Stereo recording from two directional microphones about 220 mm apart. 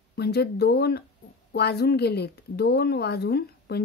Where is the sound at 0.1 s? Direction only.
50° left (ahead or behind).